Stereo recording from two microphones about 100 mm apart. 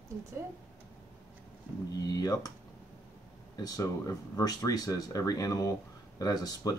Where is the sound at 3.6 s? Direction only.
40° left (ahead or behind).